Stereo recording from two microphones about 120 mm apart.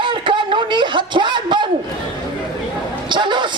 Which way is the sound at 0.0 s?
45° right (ahead or behind).